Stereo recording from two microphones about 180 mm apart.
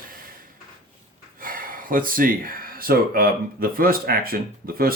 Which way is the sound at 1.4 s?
50° right (ahead or behind).